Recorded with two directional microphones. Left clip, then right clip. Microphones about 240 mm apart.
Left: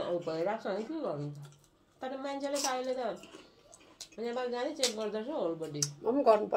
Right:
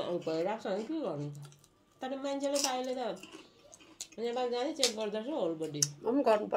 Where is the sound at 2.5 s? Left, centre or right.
Centre.